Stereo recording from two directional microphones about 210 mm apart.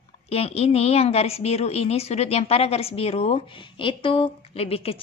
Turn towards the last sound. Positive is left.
turn(degrees=25)  # may be behind; listen again after turning